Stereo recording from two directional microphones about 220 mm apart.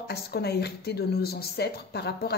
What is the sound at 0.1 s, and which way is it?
A woman's voice, 45° left (ahead or behind).